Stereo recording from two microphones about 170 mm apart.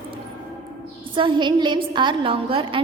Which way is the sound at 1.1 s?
30° right (ahead or behind).